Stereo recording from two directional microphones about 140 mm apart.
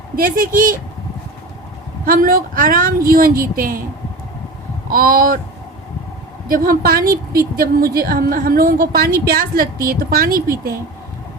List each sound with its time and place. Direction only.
0.2 s speech: 90° right
2.0 s a woman's voice: 90° right
4.9 s speech: 85° right
6.5 s a woman's voice: 90° right